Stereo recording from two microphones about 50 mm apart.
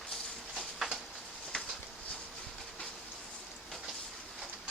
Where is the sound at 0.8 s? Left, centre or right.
Centre.